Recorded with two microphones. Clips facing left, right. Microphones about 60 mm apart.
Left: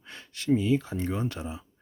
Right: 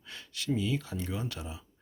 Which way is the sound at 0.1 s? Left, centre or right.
Left.